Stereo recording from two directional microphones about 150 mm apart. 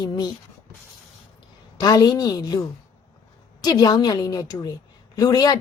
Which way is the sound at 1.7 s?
25° left (ahead or behind).